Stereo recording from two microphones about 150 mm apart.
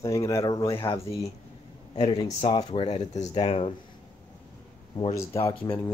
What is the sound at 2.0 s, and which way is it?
Speech, 35° left (ahead or behind).